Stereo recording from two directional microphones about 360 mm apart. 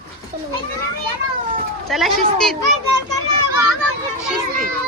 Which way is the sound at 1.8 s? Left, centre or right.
Centre.